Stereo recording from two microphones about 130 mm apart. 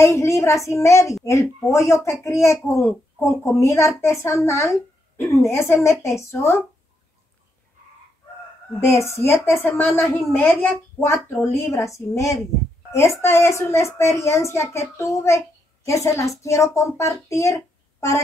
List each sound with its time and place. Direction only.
0.0 s a woman's voice: 20° left (ahead or behind)
8.7 s speech: 20° left (ahead or behind)